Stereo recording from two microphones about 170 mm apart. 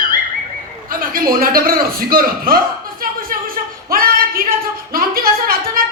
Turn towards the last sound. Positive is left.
turn(degrees=-60)  # may be behind; listen again after turning